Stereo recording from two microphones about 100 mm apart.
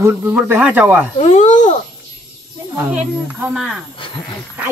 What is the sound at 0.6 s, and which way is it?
Speech, 10° right (ahead or behind).